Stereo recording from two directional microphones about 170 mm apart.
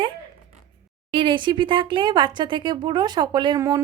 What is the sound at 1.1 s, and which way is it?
Speech, 30° right (ahead or behind).